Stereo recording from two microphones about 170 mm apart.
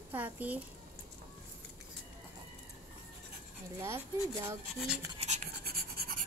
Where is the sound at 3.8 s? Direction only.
15° right (ahead or behind).